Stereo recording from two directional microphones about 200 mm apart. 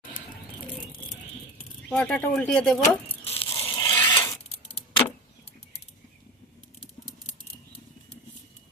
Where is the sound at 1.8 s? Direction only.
5° left (ahead or behind).